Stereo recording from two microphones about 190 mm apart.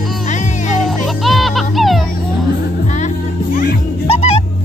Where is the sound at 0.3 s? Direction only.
40° left (ahead or behind).